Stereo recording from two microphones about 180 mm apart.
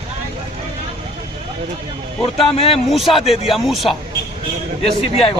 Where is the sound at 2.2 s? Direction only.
35° left (ahead or behind).